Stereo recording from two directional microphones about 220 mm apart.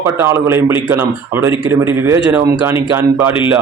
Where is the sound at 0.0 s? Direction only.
10° right (ahead or behind).